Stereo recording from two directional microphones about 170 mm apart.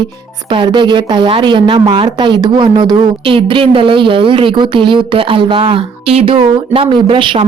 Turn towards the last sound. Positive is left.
turn(degrees=-30)  # may be behind; listen again after turning